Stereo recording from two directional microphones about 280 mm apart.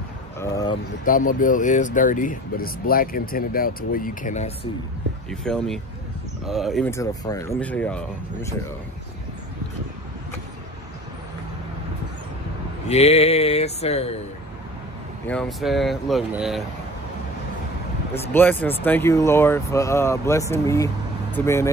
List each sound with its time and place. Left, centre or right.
0.4 s a sound: centre
1.0 s speech: left
5.3 s speech: centre
12.8 s speech: left
15.2 s speech: centre
18.3 s speech: centre